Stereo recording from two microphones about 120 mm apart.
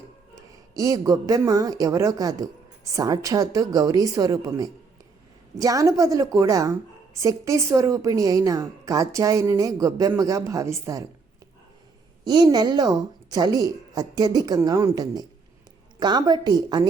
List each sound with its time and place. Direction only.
0.8 s speech: 30° right (ahead or behind)
12.2 s a woman's voice: 35° right (ahead or behind)